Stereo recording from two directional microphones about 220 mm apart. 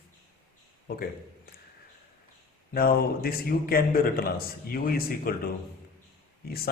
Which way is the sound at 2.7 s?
45° left (ahead or behind).